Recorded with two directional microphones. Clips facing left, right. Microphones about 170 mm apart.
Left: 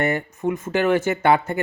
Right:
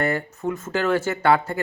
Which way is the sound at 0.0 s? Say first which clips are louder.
Left 2 dB; 20° left (ahead or behind).